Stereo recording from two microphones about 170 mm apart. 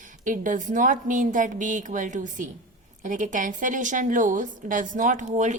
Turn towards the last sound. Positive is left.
turn(degrees=-45)  # may be behind; listen again after turning